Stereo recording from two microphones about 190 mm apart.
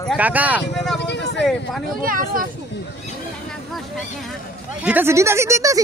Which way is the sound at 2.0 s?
45° right (ahead or behind).